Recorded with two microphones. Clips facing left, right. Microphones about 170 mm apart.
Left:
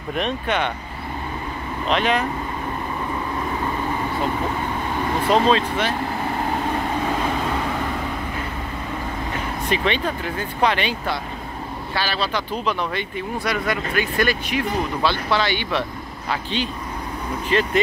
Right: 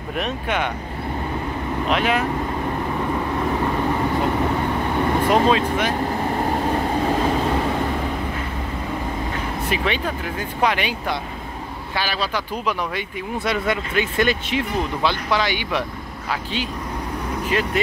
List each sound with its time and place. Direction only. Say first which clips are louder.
0.1 s speech: left 1 dB; 5° right (ahead or behind)
1.9 s speech: left 1 dB; 10° right (ahead or behind)
5.2 s speech: left 1 dB; 10° right (ahead or behind)
9.7 s speech: left 2 dB; 10° right (ahead or behind)
13.4 s speech: right 2 dB; 25° right (ahead or behind)
17.5 s speech: left 3 dB; 10° right (ahead or behind)